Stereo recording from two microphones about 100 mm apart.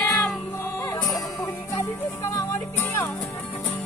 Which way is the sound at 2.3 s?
35° left (ahead or behind).